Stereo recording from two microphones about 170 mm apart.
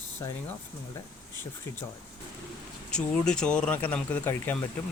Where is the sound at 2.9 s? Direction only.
5° left (ahead or behind).